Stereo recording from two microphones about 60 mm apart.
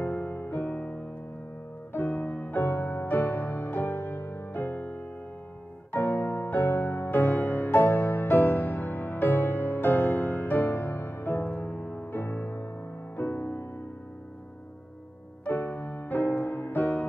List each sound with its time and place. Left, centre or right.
0.0 s music: left
2.0 s music: left
15.4 s music: left